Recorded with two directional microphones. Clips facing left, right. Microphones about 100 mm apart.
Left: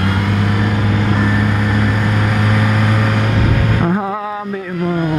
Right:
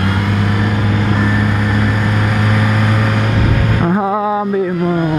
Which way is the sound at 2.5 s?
20° right (ahead or behind).